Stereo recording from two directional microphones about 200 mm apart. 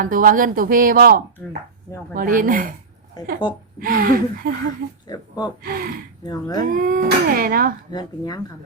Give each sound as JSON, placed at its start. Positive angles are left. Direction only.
{"t": 0.0, "sound": "speech", "side_deg": -45}
{"t": 3.8, "sound": "speech", "side_deg": -45}
{"t": 5.0, "sound": "speech", "side_deg": 20}
{"t": 5.6, "sound": "speech", "side_deg": -45}
{"t": 6.2, "sound": "speech", "side_deg": 20}
{"t": 6.7, "sound": "speech", "side_deg": -45}
{"t": 7.9, "sound": "speech", "side_deg": 20}